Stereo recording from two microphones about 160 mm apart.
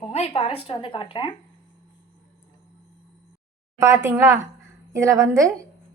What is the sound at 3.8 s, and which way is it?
A woman's voice, 15° right (ahead or behind).